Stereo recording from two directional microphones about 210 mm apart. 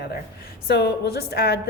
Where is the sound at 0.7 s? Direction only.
50° left (ahead or behind).